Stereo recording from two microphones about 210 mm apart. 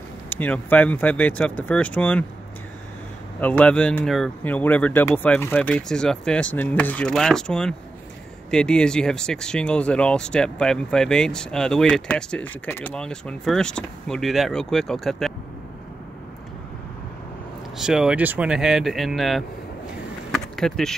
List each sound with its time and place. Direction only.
0.3 s speech: 10° left (ahead or behind)
3.3 s speech: 5° left (ahead or behind)
17.7 s speech: 5° right (ahead or behind)
20.2 s a sound: centre (ahead or behind)